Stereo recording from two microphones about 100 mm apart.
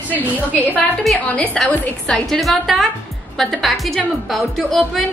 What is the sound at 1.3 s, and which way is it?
A woman's voice, 10° left (ahead or behind).